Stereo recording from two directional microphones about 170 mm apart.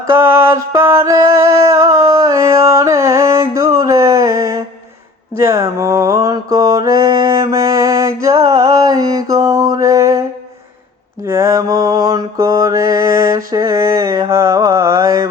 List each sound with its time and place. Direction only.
0.1 s music: 15° right (ahead or behind)
5.4 s mantra: 15° right (ahead or behind)